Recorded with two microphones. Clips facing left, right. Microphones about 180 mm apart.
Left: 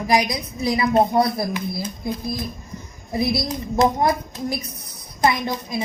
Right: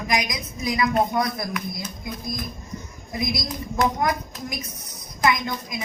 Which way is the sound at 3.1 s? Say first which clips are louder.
Left 6 dB; 30° left (ahead or behind).